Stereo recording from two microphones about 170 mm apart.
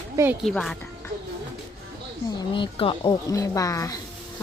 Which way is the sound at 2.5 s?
30° left (ahead or behind).